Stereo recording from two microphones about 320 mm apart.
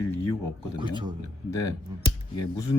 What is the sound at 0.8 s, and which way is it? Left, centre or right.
Speech, centre.